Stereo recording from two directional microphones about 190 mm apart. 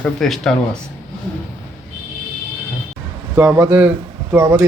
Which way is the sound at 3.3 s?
10° right (ahead or behind).